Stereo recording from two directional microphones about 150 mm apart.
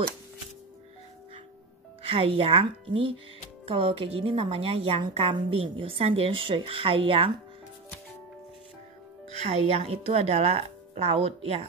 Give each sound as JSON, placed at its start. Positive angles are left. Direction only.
{"t": 2.0, "sound": "a woman's voice", "side_deg": -40}
{"t": 9.4, "sound": "speech", "side_deg": -45}